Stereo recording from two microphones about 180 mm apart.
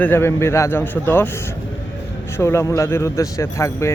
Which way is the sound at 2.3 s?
15° left (ahead or behind).